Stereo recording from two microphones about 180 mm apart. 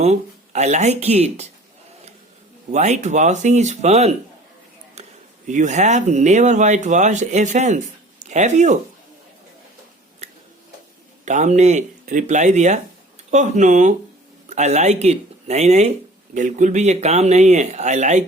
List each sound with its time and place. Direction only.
0.0 s speech: 40° right (ahead or behind)
2.7 s speech: 40° right (ahead or behind)
5.0 s a sound: 40° right (ahead or behind)
5.5 s speech: 40° right (ahead or behind)
11.3 s speech: 40° right (ahead or behind)